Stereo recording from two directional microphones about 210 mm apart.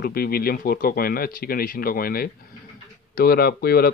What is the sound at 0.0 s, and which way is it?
Speech, 45° left (ahead or behind).